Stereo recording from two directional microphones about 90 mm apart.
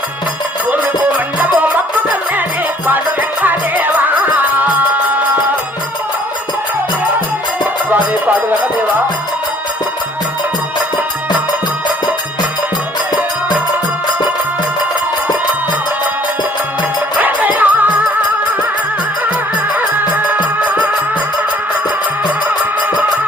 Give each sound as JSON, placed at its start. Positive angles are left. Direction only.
{"t": 0.7, "sound": "music", "side_deg": -20}
{"t": 17.2, "sound": "music", "side_deg": -20}